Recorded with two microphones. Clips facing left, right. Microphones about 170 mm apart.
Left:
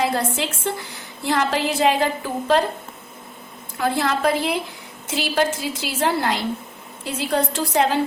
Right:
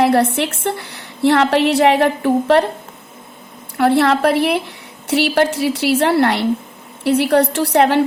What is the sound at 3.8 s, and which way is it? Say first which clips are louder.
A woman's voice: right 8 dB; 70° right (ahead or behind).